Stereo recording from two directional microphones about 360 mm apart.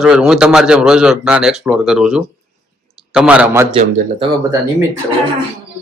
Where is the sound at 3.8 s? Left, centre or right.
Centre.